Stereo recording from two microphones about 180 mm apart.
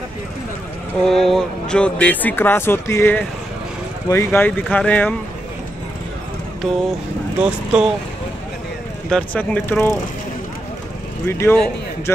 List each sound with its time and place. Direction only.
1.0 s speech: centre (ahead or behind)
6.6 s speech: 5° right (ahead or behind)
9.1 s speech: 10° left (ahead or behind)
11.2 s speech: 15° left (ahead or behind)